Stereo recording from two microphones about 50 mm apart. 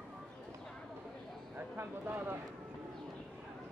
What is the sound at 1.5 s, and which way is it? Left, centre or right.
Speech, right.